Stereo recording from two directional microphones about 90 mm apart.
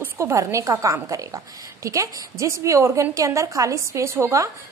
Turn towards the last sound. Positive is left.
turn(degrees=-35)  # may be behind; listen again after turning